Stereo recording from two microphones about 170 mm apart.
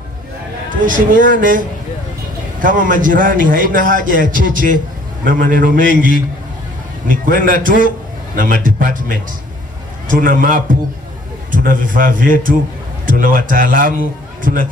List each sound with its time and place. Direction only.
0.8 s a man's voice: 50° right (ahead or behind)
2.6 s a man's voice: 55° right (ahead or behind)